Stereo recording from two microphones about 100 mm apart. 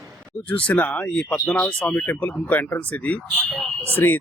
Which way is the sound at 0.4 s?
15° left (ahead or behind).